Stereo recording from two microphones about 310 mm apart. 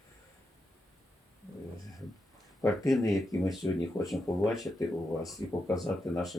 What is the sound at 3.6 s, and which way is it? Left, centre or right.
Speech, centre.